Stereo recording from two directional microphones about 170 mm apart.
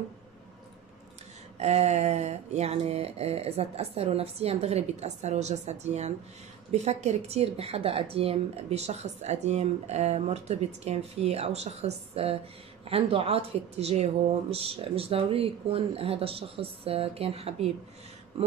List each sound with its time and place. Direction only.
1.6 s speech: 40° right (ahead or behind)